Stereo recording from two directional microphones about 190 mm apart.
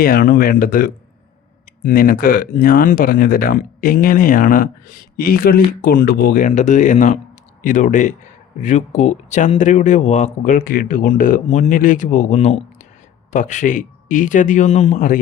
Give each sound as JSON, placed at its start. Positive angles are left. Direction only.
{"t": 0.0, "sound": "speech", "side_deg": 50}